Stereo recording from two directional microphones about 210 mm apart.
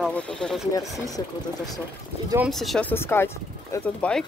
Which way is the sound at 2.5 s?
Centre (ahead or behind).